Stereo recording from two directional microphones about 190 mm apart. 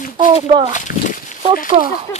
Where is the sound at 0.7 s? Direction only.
45° left (ahead or behind).